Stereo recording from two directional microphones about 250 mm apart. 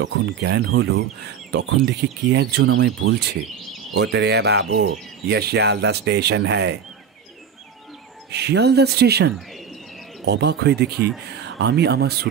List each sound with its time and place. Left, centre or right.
0.0 s speech: right
8.3 s speech: right